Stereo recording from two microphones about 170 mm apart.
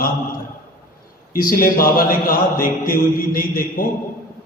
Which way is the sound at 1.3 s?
55° left (ahead or behind).